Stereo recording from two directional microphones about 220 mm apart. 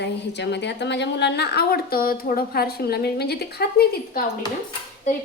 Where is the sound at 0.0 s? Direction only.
50° left (ahead or behind).